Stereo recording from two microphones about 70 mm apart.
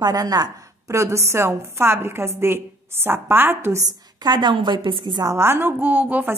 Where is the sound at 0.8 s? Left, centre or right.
Right.